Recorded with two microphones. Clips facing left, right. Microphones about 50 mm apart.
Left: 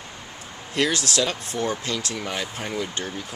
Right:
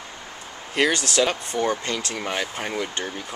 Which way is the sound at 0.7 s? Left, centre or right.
Right.